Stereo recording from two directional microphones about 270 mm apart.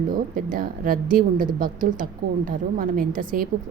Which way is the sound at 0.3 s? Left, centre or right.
Right.